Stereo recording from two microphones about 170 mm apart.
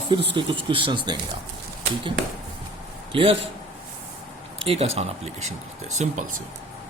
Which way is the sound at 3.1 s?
30° right (ahead or behind).